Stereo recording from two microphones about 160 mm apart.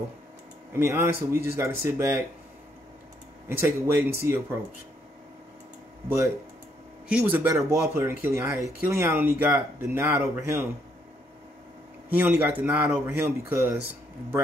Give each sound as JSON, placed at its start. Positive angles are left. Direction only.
{"t": 0.7, "sound": "speech", "side_deg": -15}
{"t": 3.4, "sound": "speech", "side_deg": -15}
{"t": 6.0, "sound": "speech", "side_deg": -20}
{"t": 12.1, "sound": "speech", "side_deg": -10}